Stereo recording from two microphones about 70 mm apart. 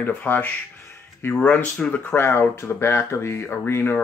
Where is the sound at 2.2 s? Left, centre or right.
Left.